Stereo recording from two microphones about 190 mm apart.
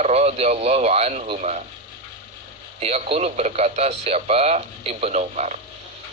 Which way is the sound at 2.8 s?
30° right (ahead or behind).